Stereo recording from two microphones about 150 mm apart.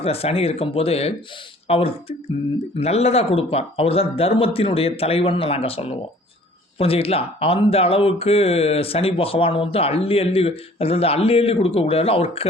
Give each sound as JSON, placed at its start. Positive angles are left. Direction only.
{"t": 0.0, "sound": "speech", "side_deg": 40}